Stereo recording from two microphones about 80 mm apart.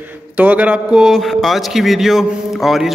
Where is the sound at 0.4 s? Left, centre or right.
Centre.